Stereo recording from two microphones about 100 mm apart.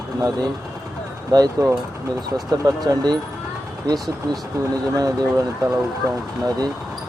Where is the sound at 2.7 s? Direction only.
40° right (ahead or behind).